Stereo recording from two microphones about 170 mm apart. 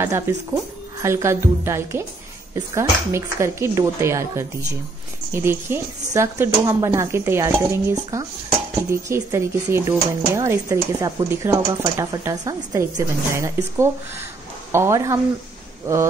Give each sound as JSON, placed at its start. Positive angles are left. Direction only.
{"t": 1.0, "sound": "speech", "side_deg": -15}